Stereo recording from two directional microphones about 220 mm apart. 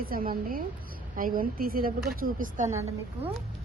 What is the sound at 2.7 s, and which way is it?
Speech, 15° right (ahead or behind).